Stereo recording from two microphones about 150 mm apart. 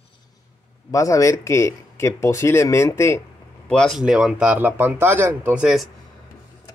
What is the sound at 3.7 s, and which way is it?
A man's voice, 5° left (ahead or behind).